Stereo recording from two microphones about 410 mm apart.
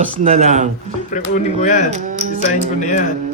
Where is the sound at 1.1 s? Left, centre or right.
Centre.